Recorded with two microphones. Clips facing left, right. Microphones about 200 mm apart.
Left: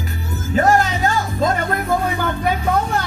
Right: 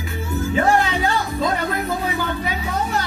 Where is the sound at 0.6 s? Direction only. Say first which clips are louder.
Left 3 dB; 40° left (ahead or behind).